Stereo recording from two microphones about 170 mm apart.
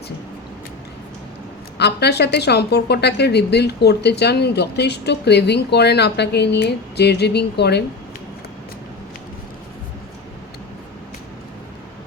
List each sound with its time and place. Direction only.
1.8 s a woman's voice: 75° left (ahead or behind)